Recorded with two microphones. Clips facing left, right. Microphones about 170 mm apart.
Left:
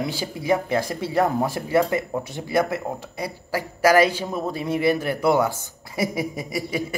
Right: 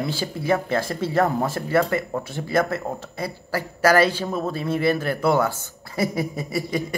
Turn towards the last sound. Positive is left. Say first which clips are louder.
# right 1 dB
turn(degrees=10)  # may be behind; listen again after turning